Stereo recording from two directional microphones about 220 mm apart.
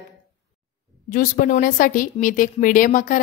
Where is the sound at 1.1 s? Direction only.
35° left (ahead or behind).